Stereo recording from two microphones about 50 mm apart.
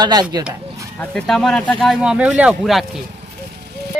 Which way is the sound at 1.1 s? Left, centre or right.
Centre.